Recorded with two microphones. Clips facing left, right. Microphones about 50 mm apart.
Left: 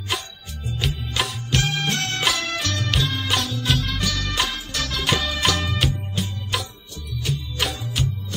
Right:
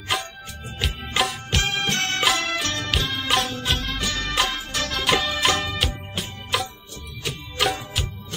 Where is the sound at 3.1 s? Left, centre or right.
Centre.